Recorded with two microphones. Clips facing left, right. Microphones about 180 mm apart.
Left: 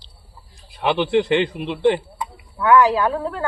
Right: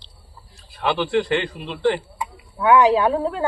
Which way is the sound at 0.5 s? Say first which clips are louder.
Left 2 dB; 20° left (ahead or behind).